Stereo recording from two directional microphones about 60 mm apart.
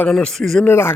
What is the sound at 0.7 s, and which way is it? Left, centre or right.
Speech, left.